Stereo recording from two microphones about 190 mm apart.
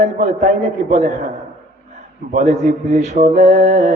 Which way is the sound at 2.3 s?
40° right (ahead or behind).